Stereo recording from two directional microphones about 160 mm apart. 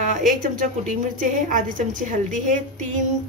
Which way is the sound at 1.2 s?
55° right (ahead or behind).